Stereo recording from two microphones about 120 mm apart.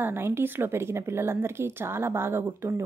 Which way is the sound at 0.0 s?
20° right (ahead or behind).